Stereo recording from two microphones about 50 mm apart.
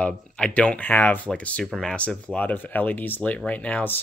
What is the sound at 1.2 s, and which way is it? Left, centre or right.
Speech, left.